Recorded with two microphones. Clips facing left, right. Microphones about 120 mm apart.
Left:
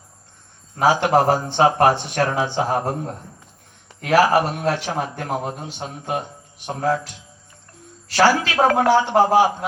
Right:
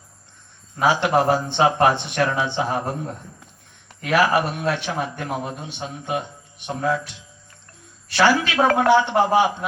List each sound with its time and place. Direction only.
0.8 s a man's voice: 45° left (ahead or behind)